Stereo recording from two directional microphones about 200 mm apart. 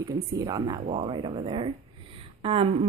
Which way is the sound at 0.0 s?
20° right (ahead or behind).